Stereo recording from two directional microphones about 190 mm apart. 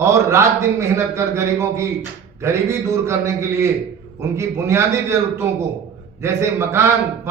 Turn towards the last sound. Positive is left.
turn(degrees=-15)  # may be behind; listen again after turning